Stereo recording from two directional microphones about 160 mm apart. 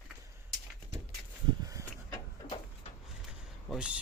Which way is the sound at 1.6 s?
20° right (ahead or behind).